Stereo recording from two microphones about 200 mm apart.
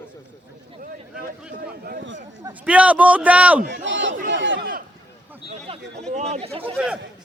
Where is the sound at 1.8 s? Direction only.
50° right (ahead or behind).